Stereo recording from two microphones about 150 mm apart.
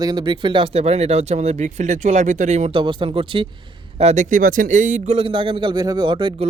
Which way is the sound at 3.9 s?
50° right (ahead or behind).